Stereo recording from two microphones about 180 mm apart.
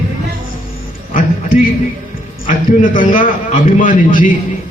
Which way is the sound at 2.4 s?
50° left (ahead or behind).